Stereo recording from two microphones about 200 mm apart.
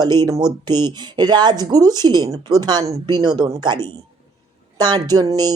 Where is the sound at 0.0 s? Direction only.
20° right (ahead or behind).